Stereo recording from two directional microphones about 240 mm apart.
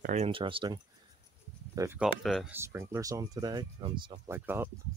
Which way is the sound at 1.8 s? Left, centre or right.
Centre.